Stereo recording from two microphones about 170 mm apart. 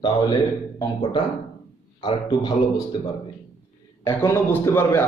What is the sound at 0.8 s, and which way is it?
A man's voice, 25° left (ahead or behind).